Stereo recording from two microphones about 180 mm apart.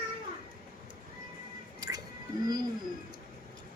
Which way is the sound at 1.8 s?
20° right (ahead or behind).